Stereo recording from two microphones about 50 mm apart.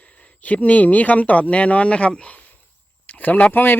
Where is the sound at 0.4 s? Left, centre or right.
Left.